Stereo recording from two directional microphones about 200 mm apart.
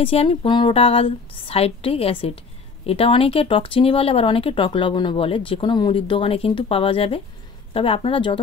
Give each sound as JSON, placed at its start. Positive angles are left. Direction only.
{"t": 0.0, "sound": "speech", "side_deg": 30}